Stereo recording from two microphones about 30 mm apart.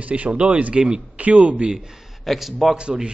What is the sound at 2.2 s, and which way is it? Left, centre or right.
Speech, centre.